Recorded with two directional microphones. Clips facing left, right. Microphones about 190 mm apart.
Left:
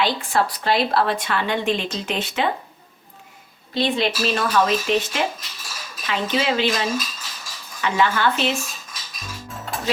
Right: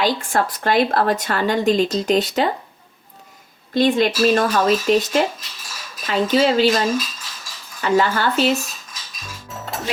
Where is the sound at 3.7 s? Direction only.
45° right (ahead or behind).